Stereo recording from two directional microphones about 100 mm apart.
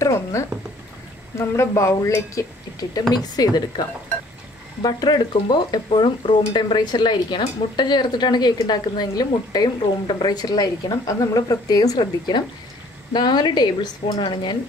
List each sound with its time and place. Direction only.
0.0 s a sound: 30° left (ahead or behind)
1.7 s speech: 30° left (ahead or behind)
4.8 s speech: 45° left (ahead or behind)